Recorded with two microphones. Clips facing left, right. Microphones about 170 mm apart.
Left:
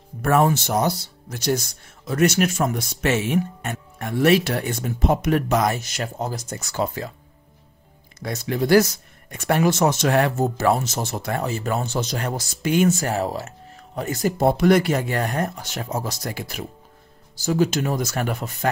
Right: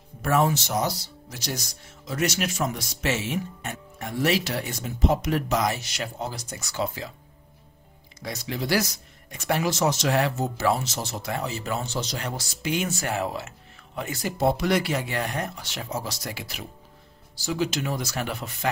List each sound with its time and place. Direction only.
0.2 s speech: 55° left (ahead or behind)
8.2 s speech: 50° left (ahead or behind)